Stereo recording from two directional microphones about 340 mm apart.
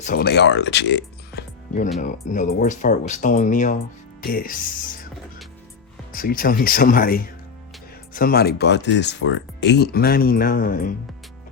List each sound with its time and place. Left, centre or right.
0.0 s speech: left
6.1 s speech: left